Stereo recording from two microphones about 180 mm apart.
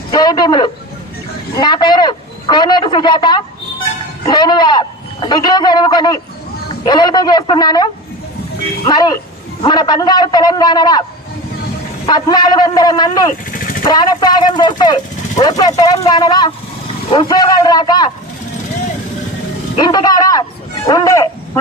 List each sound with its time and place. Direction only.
0.1 s a man's voice: 20° left (ahead or behind)
8.9 s a man's voice: 25° left (ahead or behind)
12.0 s a man's voice: 25° left (ahead or behind)
19.7 s a man's voice: 25° left (ahead or behind)